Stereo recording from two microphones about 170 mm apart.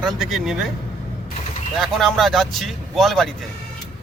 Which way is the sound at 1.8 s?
Centre (ahead or behind).